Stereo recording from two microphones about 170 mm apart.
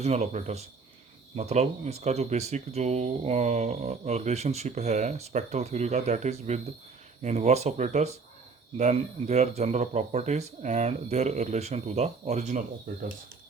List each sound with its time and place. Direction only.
0.0 s speech: 40° right (ahead or behind)